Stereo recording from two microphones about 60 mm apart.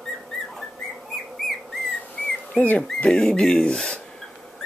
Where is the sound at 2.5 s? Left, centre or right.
Left.